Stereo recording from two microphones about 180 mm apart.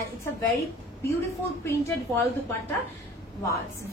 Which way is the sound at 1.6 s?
10° left (ahead or behind).